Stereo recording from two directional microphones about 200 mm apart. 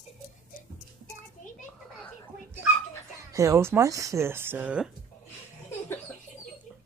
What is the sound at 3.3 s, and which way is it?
Speech, 15° right (ahead or behind).